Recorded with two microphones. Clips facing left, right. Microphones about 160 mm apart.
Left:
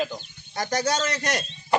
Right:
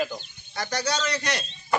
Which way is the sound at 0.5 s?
45° left (ahead or behind).